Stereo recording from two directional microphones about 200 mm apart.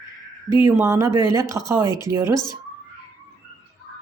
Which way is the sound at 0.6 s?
15° right (ahead or behind).